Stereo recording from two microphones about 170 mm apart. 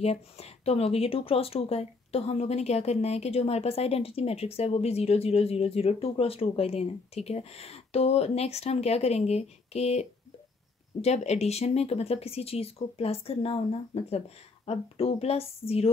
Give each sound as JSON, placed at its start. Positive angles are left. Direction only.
{"t": 0.0, "sound": "speech", "side_deg": 35}